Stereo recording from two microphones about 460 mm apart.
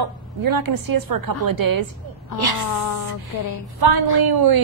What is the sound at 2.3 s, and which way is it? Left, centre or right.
Speech, left.